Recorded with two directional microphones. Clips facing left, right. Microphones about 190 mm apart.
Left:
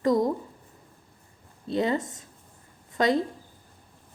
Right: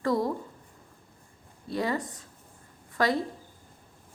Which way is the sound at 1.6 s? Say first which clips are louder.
Left 4 dB; 20° left (ahead or behind).